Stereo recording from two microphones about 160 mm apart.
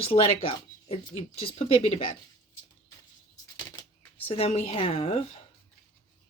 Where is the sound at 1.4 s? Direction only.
35° left (ahead or behind).